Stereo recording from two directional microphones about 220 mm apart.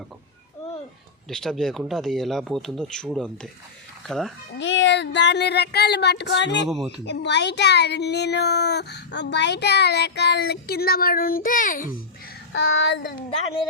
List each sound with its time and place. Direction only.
1.3 s speech: centre (ahead or behind)
4.5 s speech: 55° left (ahead or behind); by 11.9 s 40° left (ahead or behind)
12.5 s speech: 55° left (ahead or behind)